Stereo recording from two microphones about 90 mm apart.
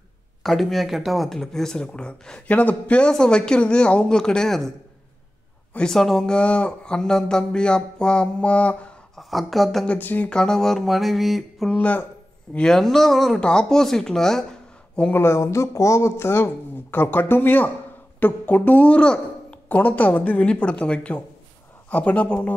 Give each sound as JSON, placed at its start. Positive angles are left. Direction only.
{"t": 0.4, "sound": "speech", "side_deg": 0}
{"t": 9.1, "sound": "a woman's voice", "side_deg": 0}
{"t": 9.8, "sound": "a sound", "side_deg": 20}
{"t": 11.7, "sound": "speech", "side_deg": 15}
{"t": 12.5, "sound": "a sound", "side_deg": 5}
{"t": 15.1, "sound": "speech", "side_deg": 30}